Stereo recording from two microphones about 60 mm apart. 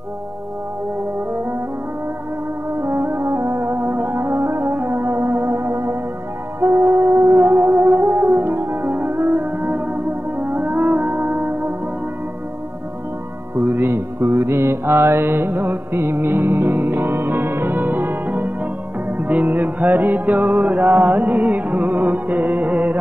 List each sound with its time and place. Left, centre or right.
2.7 s brass instrument: right
6.6 s music: right
13.6 s mantra: right
19.0 s music: right